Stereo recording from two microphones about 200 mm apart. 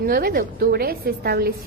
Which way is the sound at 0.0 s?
50° right (ahead or behind).